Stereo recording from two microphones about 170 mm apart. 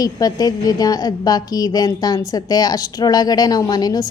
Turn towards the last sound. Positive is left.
turn(degrees=20)  # may be behind; listen again after turning